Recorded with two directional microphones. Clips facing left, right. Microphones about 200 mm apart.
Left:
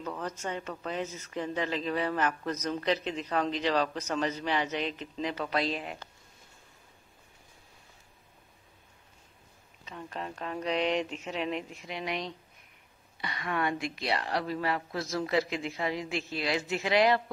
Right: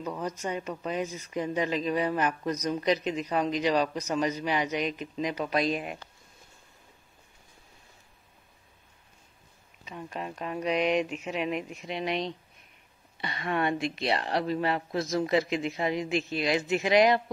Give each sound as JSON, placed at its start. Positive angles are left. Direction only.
{"t": 0.0, "sound": "a man's voice", "side_deg": -10}
{"t": 9.8, "sound": "a man's voice", "side_deg": -10}